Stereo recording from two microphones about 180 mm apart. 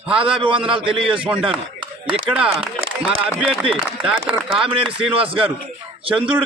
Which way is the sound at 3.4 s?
5° right (ahead or behind).